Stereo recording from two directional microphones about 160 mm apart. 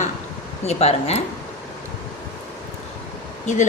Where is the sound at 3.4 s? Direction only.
50° left (ahead or behind).